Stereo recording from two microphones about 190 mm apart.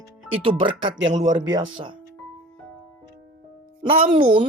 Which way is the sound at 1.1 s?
40° right (ahead or behind).